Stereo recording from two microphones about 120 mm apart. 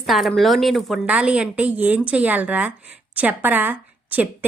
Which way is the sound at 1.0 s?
10° right (ahead or behind).